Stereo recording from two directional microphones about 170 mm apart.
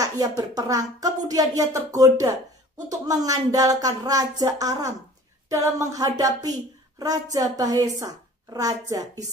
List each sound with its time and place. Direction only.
0.4 s speech: 20° right (ahead or behind)